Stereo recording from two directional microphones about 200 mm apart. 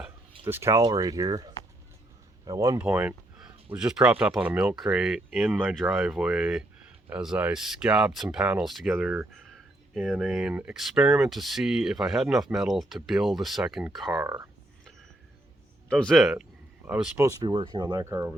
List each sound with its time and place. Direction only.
0.4 s speech: 10° right (ahead or behind)
15.9 s speech: 5° left (ahead or behind); by 17.8 s 25° right (ahead or behind)
17.9 s speech: 15° right (ahead or behind)